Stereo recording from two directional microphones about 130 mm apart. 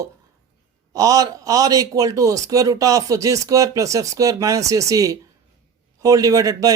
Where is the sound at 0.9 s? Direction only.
25° right (ahead or behind).